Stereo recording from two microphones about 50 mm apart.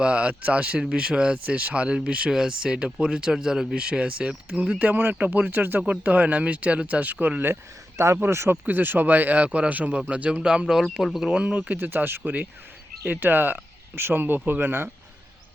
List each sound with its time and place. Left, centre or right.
0.0 s speech: right
4.8 s speech: right
5.9 s speech: right
7.5 s speech: right
8.3 s speech: right
8.6 s speech: right; by 10.8 s centre
11.0 s speech: centre
11.3 s speech: centre
11.8 s speech: right
12.2 s speech: right
13.1 s speech: right